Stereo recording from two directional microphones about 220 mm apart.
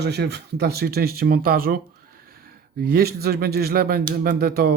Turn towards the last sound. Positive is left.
turn(degrees=-45)  # may be behind; listen again after turning